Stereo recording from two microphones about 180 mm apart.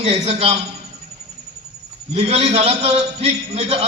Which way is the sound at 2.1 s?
35° right (ahead or behind).